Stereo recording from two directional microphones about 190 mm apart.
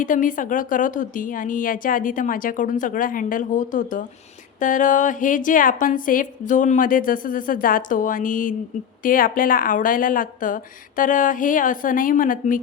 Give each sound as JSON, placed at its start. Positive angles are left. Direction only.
{"t": 0.0, "sound": "a woman's voice", "side_deg": 45}